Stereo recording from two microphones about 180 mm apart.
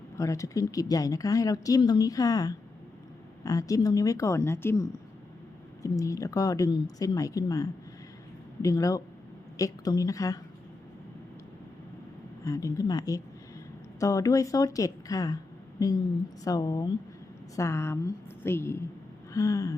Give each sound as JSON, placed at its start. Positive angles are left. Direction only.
{"t": 0.2, "sound": "a woman's voice", "side_deg": 20}
{"t": 12.5, "sound": "a woman's voice", "side_deg": 15}
{"t": 19.3, "sound": "a sound", "side_deg": 20}